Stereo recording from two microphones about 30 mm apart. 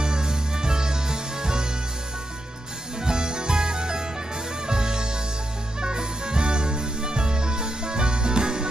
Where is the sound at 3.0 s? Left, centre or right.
Right.